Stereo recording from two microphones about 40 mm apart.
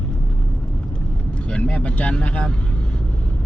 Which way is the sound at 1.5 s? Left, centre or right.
Left.